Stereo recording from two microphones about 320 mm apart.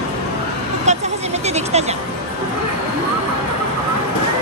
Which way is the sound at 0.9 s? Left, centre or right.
Right.